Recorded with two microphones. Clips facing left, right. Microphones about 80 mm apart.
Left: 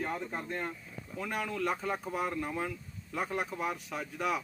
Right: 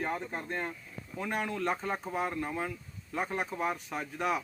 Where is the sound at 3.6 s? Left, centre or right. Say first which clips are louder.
Right 2 dB; right.